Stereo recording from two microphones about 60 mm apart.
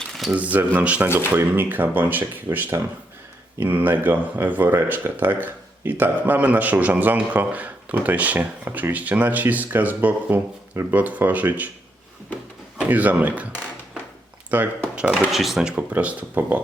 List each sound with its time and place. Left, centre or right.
0.3 s speech: right
12.8 s speech: right
14.5 s speech: right
14.9 s speech: centre
15.3 s speech: centre
15.7 s speech: right